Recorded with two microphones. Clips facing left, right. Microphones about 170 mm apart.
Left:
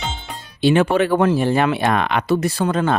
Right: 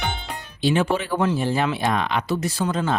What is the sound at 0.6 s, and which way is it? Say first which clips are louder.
Speech: left 6 dB; 65° left (ahead or behind).